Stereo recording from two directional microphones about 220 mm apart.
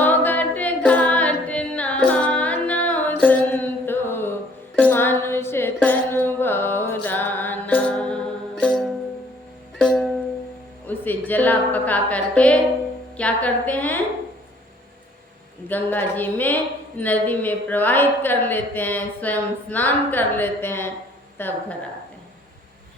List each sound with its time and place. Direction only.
0.0 s music: 10° left (ahead or behind)
9.8 s music: 5° left (ahead or behind)
10.8 s a sound: 10° left (ahead or behind)
13.1 s speech: 5° left (ahead or behind)
15.7 s speech: 10° left (ahead or behind)